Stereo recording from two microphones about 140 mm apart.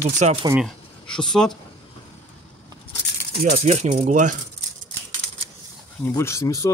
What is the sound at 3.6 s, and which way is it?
Speech, 55° right (ahead or behind).